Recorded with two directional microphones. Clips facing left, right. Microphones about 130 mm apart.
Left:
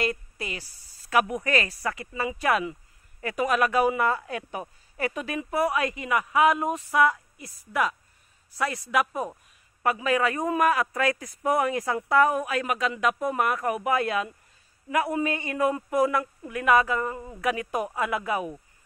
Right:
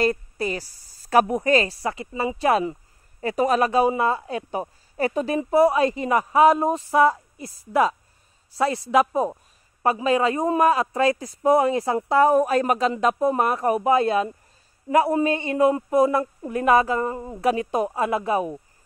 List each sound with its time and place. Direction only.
0.0 s a man's voice: 35° right (ahead or behind)